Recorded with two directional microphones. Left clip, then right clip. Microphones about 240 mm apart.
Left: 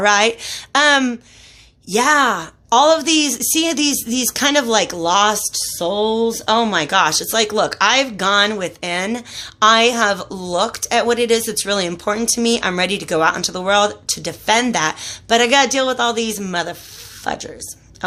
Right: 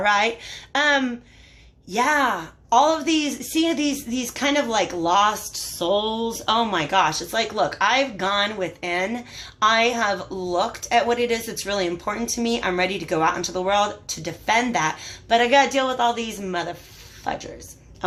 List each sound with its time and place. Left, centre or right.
0.0 s a woman's voice: left